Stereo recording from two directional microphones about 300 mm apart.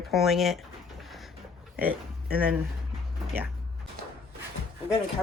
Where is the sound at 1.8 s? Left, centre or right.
Centre.